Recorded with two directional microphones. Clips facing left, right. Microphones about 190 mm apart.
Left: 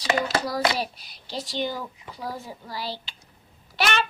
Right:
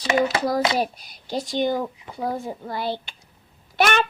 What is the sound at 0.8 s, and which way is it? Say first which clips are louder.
A child's voice: right 6 dB; 50° right (ahead or behind).